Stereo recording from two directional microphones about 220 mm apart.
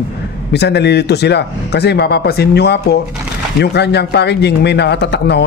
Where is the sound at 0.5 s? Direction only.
50° left (ahead or behind).